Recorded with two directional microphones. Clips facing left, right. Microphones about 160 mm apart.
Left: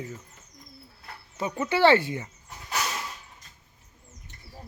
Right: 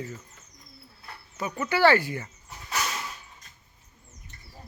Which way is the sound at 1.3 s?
25° left (ahead or behind).